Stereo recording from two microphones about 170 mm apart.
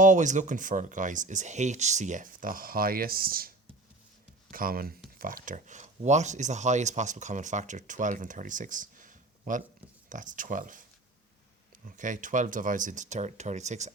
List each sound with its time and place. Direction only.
0.0 s speech: 45° right (ahead or behind)
4.5 s speech: 55° right (ahead or behind)
11.9 s speech: 50° right (ahead or behind)